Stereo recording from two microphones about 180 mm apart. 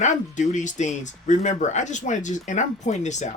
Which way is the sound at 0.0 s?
45° left (ahead or behind).